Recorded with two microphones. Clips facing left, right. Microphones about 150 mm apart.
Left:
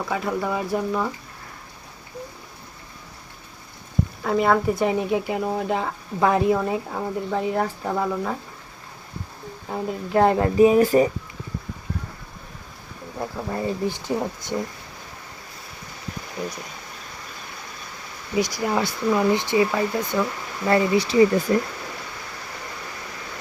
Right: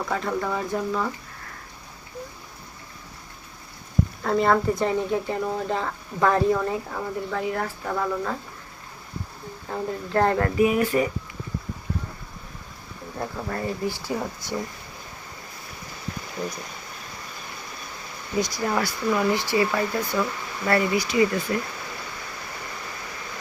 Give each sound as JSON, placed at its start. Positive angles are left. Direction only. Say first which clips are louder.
{"t": 0.1, "sound": "speech", "louder": "left 2 dB", "side_deg": 10}
{"t": 4.2, "sound": "speech", "louder": "left 1 dB", "side_deg": 5}
{"t": 9.6, "sound": "speech", "louder": "left 1 dB", "side_deg": 15}
{"t": 10.6, "sound": "speech", "louder": "left 7 dB", "side_deg": 30}
{"t": 13.1, "sound": "speech", "louder": "left 2 dB", "side_deg": 10}
{"t": 18.3, "sound": "speech", "louder": "left 2 dB", "side_deg": 10}